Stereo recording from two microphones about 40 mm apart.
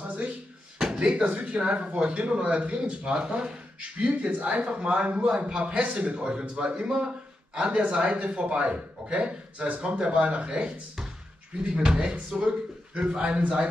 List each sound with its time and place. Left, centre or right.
0.7 s a sound: right
1.4 s speech: right
4.3 s a man's voice: right